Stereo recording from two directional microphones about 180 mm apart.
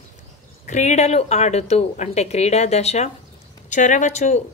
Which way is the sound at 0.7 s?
40° left (ahead or behind).